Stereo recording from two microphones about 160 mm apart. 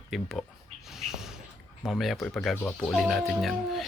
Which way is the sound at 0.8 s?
Centre (ahead or behind).